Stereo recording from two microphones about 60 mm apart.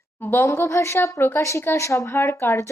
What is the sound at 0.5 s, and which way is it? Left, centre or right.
A woman's voice, left.